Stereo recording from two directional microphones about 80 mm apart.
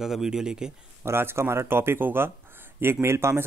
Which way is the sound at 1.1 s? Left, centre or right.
Right.